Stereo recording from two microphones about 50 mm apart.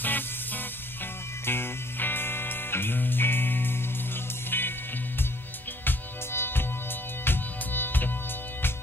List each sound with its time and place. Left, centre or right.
0.0 s music: left
1.4 s music: left
5.9 s music: left